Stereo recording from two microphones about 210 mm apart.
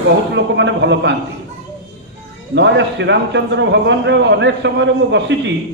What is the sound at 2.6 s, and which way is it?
A man's voice, 60° right (ahead or behind).